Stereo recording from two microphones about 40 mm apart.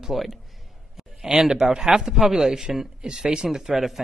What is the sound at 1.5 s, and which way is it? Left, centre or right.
A man's voice, centre.